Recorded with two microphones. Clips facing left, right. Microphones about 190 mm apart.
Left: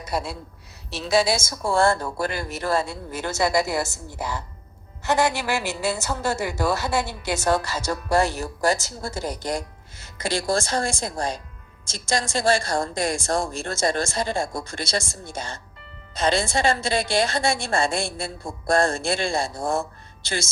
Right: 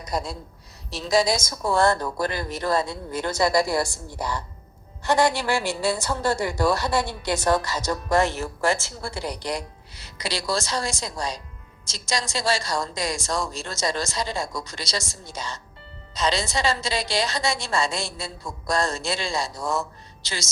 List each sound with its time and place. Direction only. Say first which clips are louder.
1.4 s speech: even; 25° left (ahead or behind)
2.0 s a woman's voice: right 1 dB; 10° left (ahead or behind)
2.6 s speech: even; 25° left (ahead or behind)
2.8 s a woman's voice: right 2 dB; 5° left (ahead or behind)
3.5 s speech: right 1 dB; 25° left (ahead or behind)
5.0 s a woman's voice: right 1 dB; 5° left (ahead or behind)
8.3 s a woman's voice: left 1 dB; 35° left (ahead or behind); by 20.5 s 55° left (ahead or behind)